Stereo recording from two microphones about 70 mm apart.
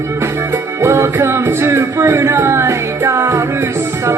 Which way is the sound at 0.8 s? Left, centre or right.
Right.